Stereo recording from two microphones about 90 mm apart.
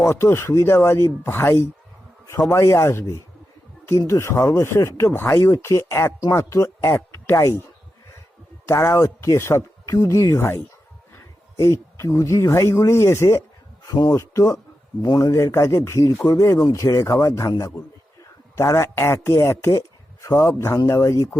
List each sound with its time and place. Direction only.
0.0 s speech: 30° left (ahead or behind)
8.6 s speech: 30° left (ahead or behind)
13.8 s speech: 40° left (ahead or behind)
18.5 s speech: 35° left (ahead or behind)
20.7 s speech: 35° left (ahead or behind)